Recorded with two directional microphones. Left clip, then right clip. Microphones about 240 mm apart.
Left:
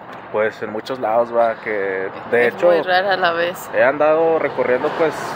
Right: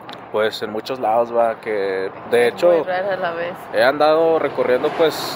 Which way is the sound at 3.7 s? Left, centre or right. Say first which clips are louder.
Even; centre.